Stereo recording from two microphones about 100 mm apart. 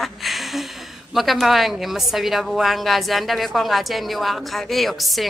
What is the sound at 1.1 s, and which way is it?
A woman's voice, centre (ahead or behind).